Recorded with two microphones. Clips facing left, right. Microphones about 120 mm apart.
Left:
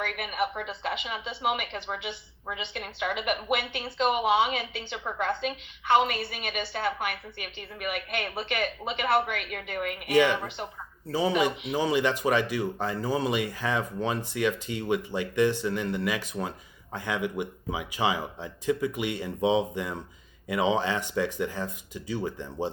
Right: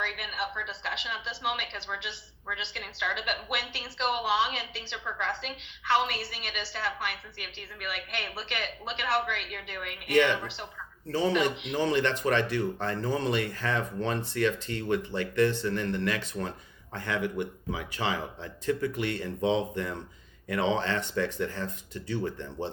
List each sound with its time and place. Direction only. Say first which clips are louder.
0.0 s a woman's voice: left 5 dB; 45° left (ahead or behind)
10.1 s speech: left 1 dB; 10° left (ahead or behind)
10.3 s a woman's voice: left 3 dB; 45° left (ahead or behind)
11.1 s speech: left 1 dB; 10° left (ahead or behind)